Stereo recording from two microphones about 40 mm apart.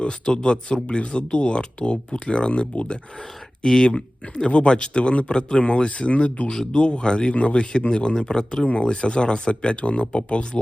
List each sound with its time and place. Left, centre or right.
0.0 s speech: left
3.6 s speech: centre